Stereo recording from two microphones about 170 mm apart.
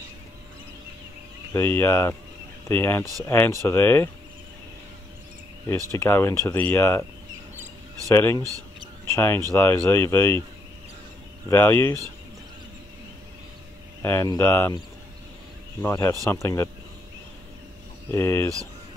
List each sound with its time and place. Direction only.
1.5 s speech: 15° left (ahead or behind)
5.9 s speech: 15° left (ahead or behind)
8.1 s speech: 15° left (ahead or behind)
11.4 s speech: 15° left (ahead or behind)
14.0 s speech: 15° left (ahead or behind)
15.8 s speech: 15° left (ahead or behind)
18.1 s speech: 15° left (ahead or behind)